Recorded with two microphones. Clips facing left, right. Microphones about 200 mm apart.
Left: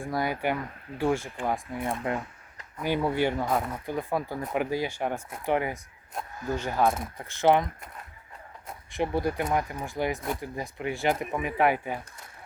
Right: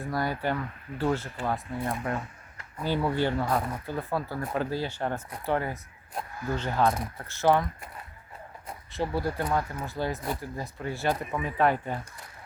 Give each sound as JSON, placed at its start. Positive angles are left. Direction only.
{"t": 0.0, "sound": "speech", "side_deg": 15}
{"t": 8.9, "sound": "speech", "side_deg": 15}